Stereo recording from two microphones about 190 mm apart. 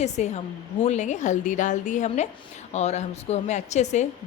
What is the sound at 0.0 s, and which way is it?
A woman's voice, 35° left (ahead or behind).